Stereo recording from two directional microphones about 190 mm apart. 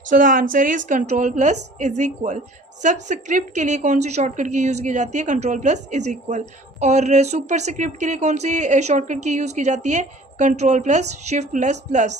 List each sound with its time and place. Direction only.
0.1 s a woman's voice: 45° right (ahead or behind)